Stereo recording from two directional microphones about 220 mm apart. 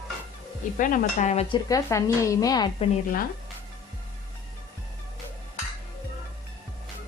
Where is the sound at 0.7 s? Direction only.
35° left (ahead or behind).